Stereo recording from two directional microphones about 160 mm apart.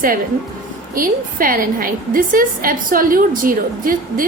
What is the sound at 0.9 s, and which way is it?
A woman's voice, 60° right (ahead or behind).